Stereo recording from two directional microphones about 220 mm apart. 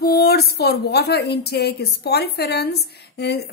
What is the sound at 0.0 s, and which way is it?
Speech, 45° left (ahead or behind).